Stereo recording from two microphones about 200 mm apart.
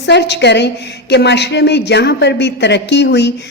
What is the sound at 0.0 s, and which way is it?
A woman's voice, 60° left (ahead or behind).